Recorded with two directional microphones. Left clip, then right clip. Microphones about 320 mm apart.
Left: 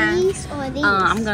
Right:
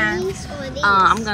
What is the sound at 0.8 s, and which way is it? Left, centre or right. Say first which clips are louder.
Speech: right 3 dB; centre.